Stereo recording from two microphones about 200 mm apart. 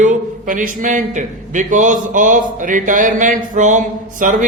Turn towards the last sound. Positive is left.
turn(degrees=-40)  # may be behind; listen again after turning